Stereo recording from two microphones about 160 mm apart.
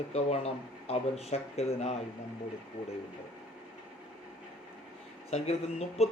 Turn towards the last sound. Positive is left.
turn(degrees=40)  # may be behind; listen again after turning